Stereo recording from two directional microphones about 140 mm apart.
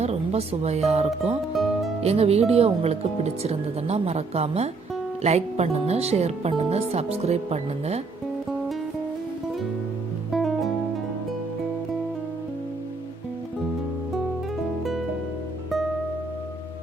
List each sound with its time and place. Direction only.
0.0 s speech: 50° right (ahead or behind)
1.5 s music: centre (ahead or behind)
2.0 s speech: 50° right (ahead or behind)
10.3 s music: centre (ahead or behind)